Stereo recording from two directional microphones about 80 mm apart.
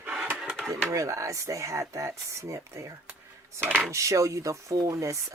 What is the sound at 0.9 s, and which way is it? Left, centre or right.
Speech, right.